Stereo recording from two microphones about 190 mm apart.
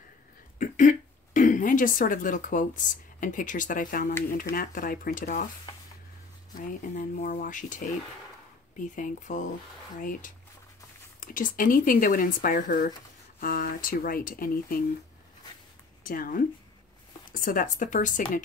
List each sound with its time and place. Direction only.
0.6 s speech: 40° left (ahead or behind)
6.5 s speech: 45° left (ahead or behind)
8.9 s speech: 40° left (ahead or behind)
11.1 s speech: 45° left (ahead or behind)
16.0 s a woman's voice: 45° left (ahead or behind)